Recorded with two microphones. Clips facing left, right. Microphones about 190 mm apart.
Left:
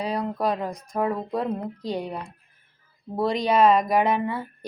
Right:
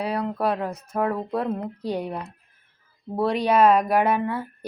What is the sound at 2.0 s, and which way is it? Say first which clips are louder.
A woman's voice: right 2 dB; 10° right (ahead or behind).